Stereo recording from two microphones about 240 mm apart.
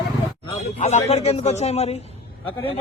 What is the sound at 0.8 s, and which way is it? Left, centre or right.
A man's voice, left.